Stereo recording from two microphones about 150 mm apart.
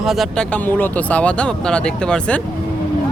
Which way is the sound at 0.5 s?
10° left (ahead or behind).